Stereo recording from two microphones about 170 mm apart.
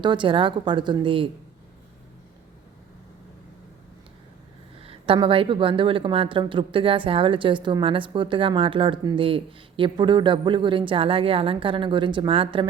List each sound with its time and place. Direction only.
0.0 s speech: 25° right (ahead or behind)
4.8 s speech: 35° right (ahead or behind)